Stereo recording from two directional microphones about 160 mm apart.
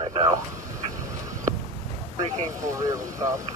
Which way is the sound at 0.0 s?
30° right (ahead or behind).